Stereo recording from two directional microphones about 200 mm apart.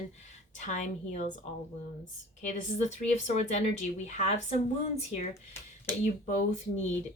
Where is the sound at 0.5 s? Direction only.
35° left (ahead or behind).